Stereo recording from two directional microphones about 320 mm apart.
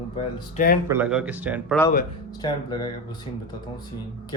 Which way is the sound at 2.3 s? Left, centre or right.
Centre.